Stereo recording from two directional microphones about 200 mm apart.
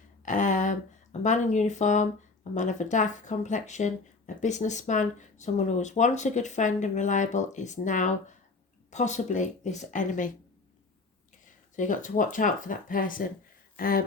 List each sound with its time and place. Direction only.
0.3 s a sound: 40° left (ahead or behind)
1.2 s speech: 35° left (ahead or behind)
11.8 s speech: 40° left (ahead or behind)